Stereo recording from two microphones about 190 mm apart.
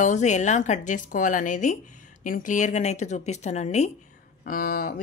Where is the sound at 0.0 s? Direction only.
40° left (ahead or behind).